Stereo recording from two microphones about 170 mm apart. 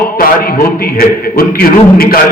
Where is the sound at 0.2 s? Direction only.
60° left (ahead or behind).